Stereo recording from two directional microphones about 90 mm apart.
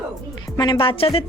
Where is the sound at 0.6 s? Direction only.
65° left (ahead or behind); by 1.3 s 90° left.